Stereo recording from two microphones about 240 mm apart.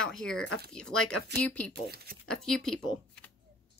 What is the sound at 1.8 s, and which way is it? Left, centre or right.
Speech, right.